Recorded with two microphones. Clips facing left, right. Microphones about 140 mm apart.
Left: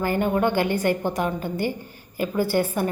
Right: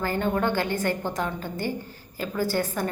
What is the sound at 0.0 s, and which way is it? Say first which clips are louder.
A woman's voice: left 3 dB; 15° left (ahead or behind).